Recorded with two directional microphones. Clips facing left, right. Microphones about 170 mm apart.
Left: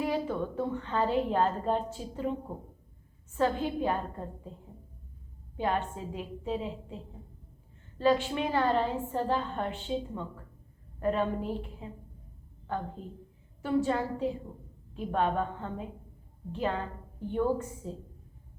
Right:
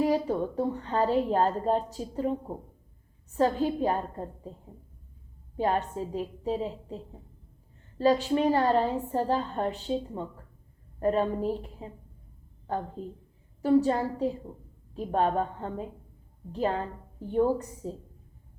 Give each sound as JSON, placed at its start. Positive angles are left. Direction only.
{"t": 0.0, "sound": "a woman's voice", "side_deg": -40}
{"t": 3.3, "sound": "a woman's voice", "side_deg": -40}
{"t": 5.5, "sound": "a woman's voice", "side_deg": -40}